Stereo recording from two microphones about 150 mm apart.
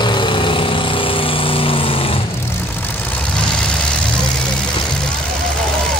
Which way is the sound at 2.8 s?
10° left (ahead or behind).